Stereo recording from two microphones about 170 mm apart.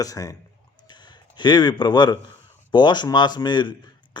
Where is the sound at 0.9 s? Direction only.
25° left (ahead or behind).